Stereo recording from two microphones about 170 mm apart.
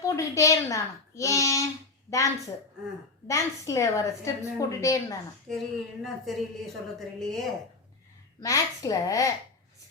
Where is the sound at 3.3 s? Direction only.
20° left (ahead or behind).